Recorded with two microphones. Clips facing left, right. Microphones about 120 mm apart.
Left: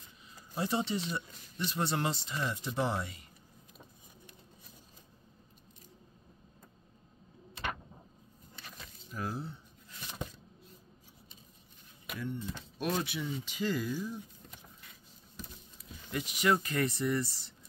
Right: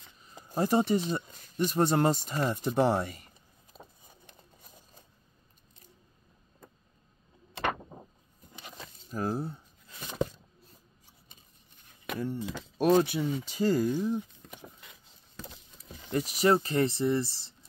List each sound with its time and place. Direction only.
0.5 s speech: 45° right (ahead or behind)
8.7 s a sound: 40° right (ahead or behind)
12.4 s speech: 90° right
12.7 s speech: 40° right (ahead or behind)
13.9 s a sound: 65° right (ahead or behind); by 15.6 s 90° right
16.1 s speech: 35° right (ahead or behind)